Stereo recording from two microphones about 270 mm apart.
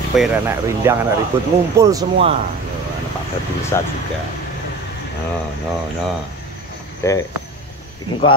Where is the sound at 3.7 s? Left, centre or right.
Centre.